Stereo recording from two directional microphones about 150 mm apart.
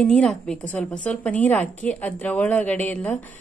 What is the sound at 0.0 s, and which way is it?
A woman's voice, 5° left (ahead or behind).